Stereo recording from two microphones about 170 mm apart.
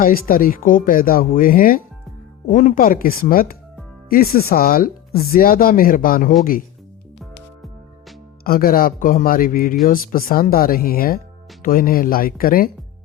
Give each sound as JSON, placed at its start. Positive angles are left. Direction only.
{"t": 0.0, "sound": "speech", "side_deg": 55}
{"t": 8.4, "sound": "speech", "side_deg": 60}